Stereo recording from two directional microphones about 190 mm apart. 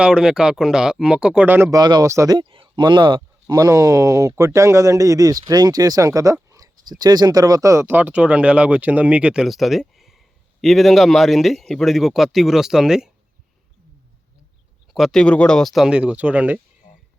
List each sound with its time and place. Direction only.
0.0 s speech: 5° right (ahead or behind)
14.9 s speech: centre (ahead or behind)